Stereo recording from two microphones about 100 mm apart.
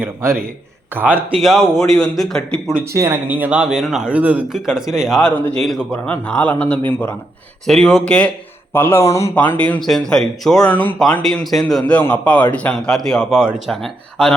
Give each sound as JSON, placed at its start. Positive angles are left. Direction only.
{"t": 0.0, "sound": "a man's voice", "side_deg": -25}
{"t": 1.4, "sound": "speech", "side_deg": 0}
{"t": 2.9, "sound": "speech", "side_deg": -30}
{"t": 3.2, "sound": "speech", "side_deg": -15}
{"t": 4.1, "sound": "speech", "side_deg": -15}
{"t": 4.5, "sound": "a man's voice", "side_deg": -5}
{"t": 7.7, "sound": "a man's voice", "side_deg": 5}
{"t": 8.7, "sound": "speech", "side_deg": 25}
{"t": 9.3, "sound": "a man's voice", "side_deg": 15}
{"t": 9.8, "sound": "speech", "side_deg": 5}
{"t": 11.0, "sound": "a man's voice", "side_deg": 5}